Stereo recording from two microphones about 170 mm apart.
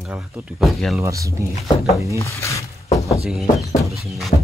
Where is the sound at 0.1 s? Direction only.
5° right (ahead or behind).